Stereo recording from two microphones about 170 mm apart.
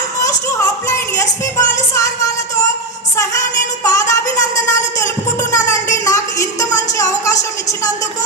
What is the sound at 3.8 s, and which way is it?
Speech, 20° left (ahead or behind).